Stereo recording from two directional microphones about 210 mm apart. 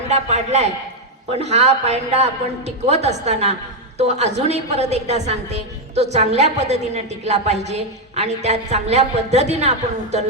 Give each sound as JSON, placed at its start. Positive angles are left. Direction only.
{"t": 0.1, "sound": "a woman's voice", "side_deg": -30}